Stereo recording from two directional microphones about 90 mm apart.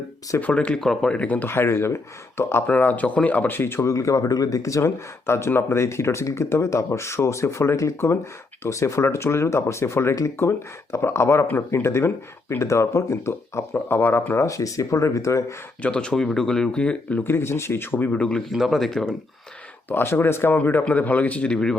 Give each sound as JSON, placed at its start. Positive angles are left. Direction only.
{"t": 0.3, "sound": "speech", "side_deg": 15}
{"t": 14.4, "sound": "speech", "side_deg": 35}
{"t": 15.8, "sound": "speech", "side_deg": 10}
{"t": 18.1, "sound": "speech", "side_deg": 10}
{"t": 19.9, "sound": "speech", "side_deg": 25}